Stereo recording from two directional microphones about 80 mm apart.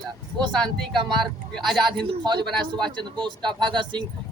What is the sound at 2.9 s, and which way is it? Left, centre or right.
Speech, right.